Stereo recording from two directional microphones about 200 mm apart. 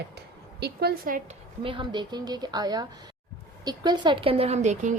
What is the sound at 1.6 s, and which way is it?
A woman's voice, 25° right (ahead or behind).